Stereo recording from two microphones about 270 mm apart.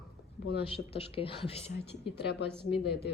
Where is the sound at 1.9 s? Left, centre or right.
Left.